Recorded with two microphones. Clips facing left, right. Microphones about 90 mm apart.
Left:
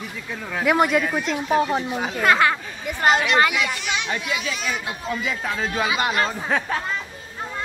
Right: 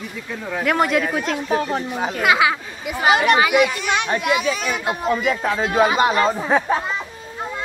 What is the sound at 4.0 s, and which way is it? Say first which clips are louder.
Speech: right 7 dB; 55° right (ahead or behind).